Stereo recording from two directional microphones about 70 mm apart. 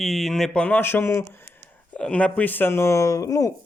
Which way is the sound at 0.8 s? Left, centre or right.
Left.